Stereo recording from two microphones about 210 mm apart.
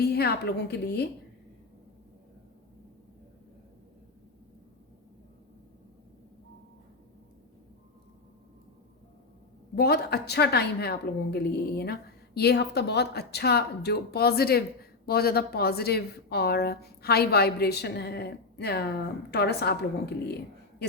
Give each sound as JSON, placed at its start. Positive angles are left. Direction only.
{"t": 0.0, "sound": "a woman's voice", "side_deg": 50}
{"t": 9.7, "sound": "a woman's voice", "side_deg": 50}